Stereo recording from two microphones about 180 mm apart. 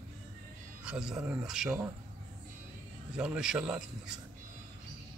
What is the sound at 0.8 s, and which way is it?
Speech, 5° right (ahead or behind).